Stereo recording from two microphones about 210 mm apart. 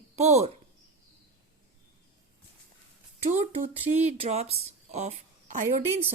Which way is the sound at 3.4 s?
30° right (ahead or behind).